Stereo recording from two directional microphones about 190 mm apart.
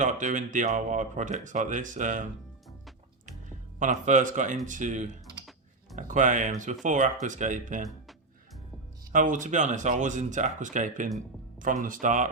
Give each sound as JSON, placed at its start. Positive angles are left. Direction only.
{"t": 0.0, "sound": "speech", "side_deg": -40}
{"t": 3.8, "sound": "speech", "side_deg": -40}
{"t": 9.1, "sound": "speech", "side_deg": -40}